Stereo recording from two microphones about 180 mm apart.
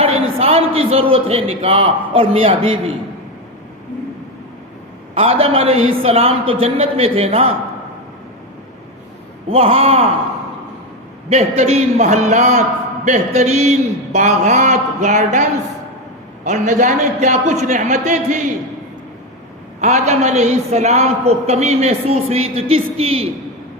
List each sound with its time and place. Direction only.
0.0 s a man's voice: 35° right (ahead or behind)
5.1 s a man's voice: 30° right (ahead or behind)
9.5 s a man's voice: 35° right (ahead or behind)
11.3 s a man's voice: 40° right (ahead or behind)
19.8 s a man's voice: 40° right (ahead or behind)